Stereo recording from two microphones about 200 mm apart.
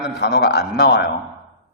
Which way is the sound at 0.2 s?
55° left (ahead or behind).